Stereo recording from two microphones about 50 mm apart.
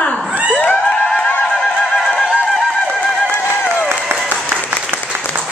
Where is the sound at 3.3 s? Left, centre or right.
Left.